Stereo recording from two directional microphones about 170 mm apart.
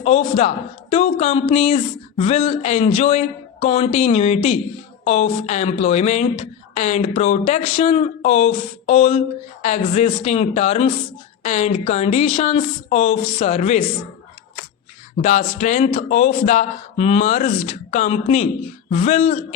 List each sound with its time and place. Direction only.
0.0 s speech: 40° left (ahead or behind)
15.2 s speech: 45° left (ahead or behind)